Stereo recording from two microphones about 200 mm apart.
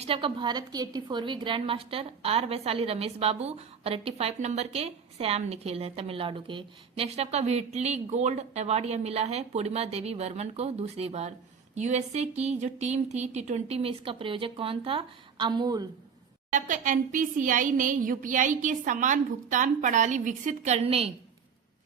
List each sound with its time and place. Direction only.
0.0 s a woman's voice: 30° right (ahead or behind)
16.5 s a woman's voice: 40° right (ahead or behind)